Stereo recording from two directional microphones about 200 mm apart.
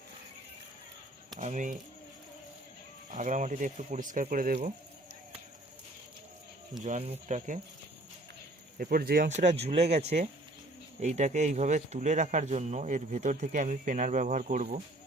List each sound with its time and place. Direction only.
1.4 s speech: 40° right (ahead or behind)
3.1 s speech: 40° right (ahead or behind)
6.8 s speech: 35° right (ahead or behind)
8.8 s speech: 50° right (ahead or behind)